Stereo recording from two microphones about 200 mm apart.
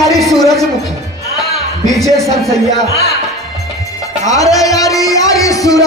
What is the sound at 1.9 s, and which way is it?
Speech, centre (ahead or behind).